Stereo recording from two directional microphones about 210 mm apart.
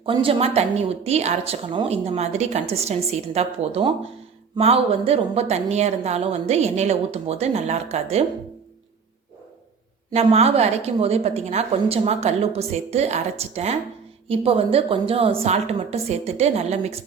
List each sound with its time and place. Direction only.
0.0 s a woman's voice: 25° right (ahead or behind)
10.1 s a woman's voice: 30° right (ahead or behind)